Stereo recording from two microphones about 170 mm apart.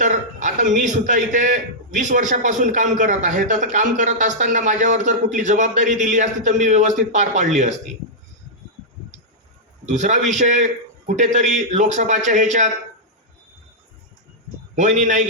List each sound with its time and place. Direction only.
0.0 s a man's voice: 45° right (ahead or behind)
9.8 s a man's voice: 45° right (ahead or behind)
14.8 s a man's voice: 45° right (ahead or behind)